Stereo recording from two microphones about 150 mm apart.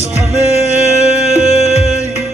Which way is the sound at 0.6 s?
45° left (ahead or behind).